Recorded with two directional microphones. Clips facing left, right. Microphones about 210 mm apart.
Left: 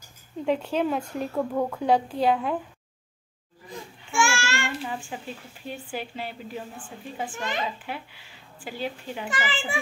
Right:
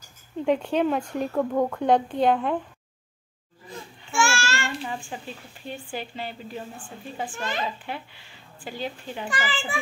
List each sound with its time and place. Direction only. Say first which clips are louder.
0.5 s speech: right 2 dB; 5° left (ahead or behind)
4.1 s child singing: even; 15° left (ahead or behind)
4.8 s a woman's voice: even; 5° left (ahead or behind)
7.3 s a woman's voice: even; 15° left (ahead or behind)
7.8 s a woman's voice: right 1 dB; 5° left (ahead or behind)
9.3 s a child's voice: even; 20° left (ahead or behind)